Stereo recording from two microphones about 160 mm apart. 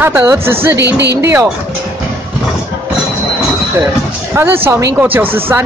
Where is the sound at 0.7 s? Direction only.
90° right.